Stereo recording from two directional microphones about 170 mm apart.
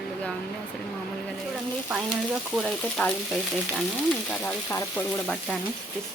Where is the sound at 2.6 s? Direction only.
Centre (ahead or behind).